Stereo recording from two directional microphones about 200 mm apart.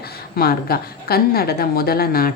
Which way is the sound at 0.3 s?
50° left (ahead or behind).